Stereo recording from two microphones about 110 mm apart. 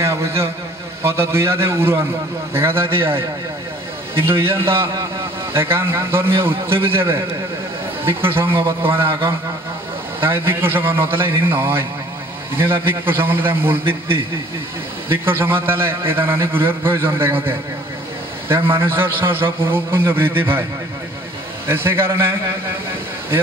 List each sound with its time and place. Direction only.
0.0 s a man's voice: 25° right (ahead or behind)
10.2 s a man's voice: 20° right (ahead or behind)
15.0 s a man's voice: 20° right (ahead or behind)
18.8 s a man's voice: 20° right (ahead or behind)
21.6 s a man's voice: 20° right (ahead or behind)